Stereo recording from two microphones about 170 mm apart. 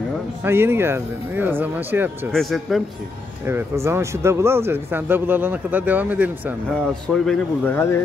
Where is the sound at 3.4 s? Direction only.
15° right (ahead or behind).